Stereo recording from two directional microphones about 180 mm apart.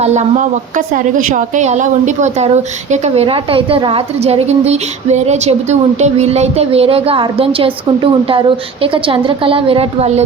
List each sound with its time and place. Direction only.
0.0 s a woman's voice: 40° right (ahead or behind)